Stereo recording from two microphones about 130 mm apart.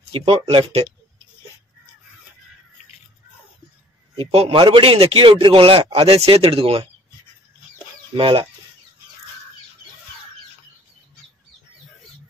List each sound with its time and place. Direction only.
0.1 s a man's voice: 45° right (ahead or behind)
4.1 s a man's voice: 50° right (ahead or behind)
8.1 s a man's voice: 45° right (ahead or behind)